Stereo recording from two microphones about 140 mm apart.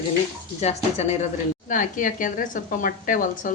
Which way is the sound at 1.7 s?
70° left (ahead or behind).